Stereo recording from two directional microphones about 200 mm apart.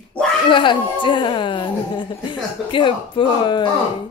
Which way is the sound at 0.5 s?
25° left (ahead or behind).